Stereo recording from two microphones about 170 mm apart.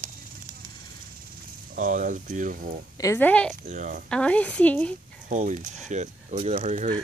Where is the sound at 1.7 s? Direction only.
50° right (ahead or behind).